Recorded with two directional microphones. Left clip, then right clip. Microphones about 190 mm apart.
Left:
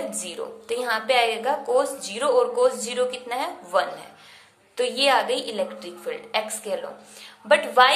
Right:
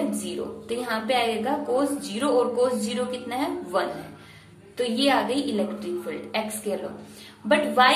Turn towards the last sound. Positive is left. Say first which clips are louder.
# left 3 dB
turn(degrees=40)  # may be behind; listen again after turning